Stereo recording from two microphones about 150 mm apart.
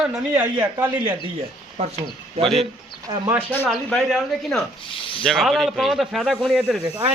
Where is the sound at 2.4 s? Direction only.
Centre (ahead or behind).